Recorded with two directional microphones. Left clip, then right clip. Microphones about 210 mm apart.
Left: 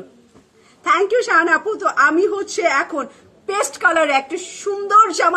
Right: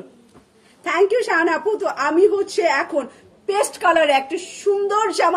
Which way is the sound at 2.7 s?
10° left (ahead or behind).